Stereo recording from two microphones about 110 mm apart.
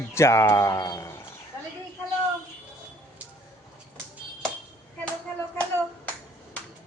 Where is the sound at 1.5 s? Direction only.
30° left (ahead or behind).